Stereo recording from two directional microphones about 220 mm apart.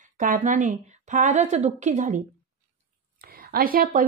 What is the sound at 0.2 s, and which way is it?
Speech, 35° right (ahead or behind).